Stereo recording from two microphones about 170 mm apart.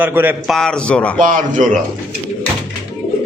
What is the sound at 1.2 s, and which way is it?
Speech, 50° right (ahead or behind).